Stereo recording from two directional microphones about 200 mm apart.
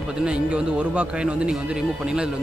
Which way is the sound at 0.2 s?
5° right (ahead or behind).